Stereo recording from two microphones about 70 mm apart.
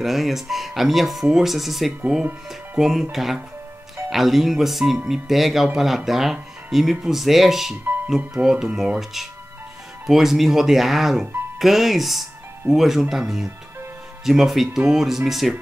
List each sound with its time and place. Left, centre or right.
0.0 s speech: centre